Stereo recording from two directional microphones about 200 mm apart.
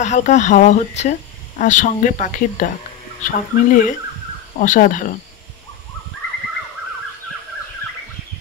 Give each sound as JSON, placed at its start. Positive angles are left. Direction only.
{"t": 0.0, "sound": "speech", "side_deg": 35}